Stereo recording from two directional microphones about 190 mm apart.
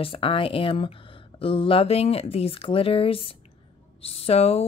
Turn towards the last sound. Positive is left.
turn(degrees=30)  # may be behind; listen again after turning